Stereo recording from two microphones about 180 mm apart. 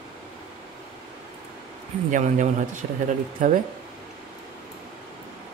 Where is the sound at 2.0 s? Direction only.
45° right (ahead or behind).